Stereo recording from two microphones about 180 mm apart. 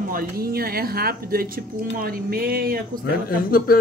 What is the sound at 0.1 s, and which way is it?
A woman's voice, 55° right (ahead or behind).